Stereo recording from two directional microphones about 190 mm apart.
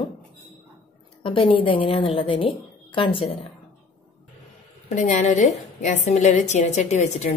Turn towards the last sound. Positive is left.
turn(degrees=35)  # may be behind; listen again after turning